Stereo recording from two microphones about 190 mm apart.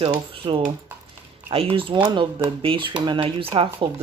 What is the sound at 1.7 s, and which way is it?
Speech, 25° right (ahead or behind).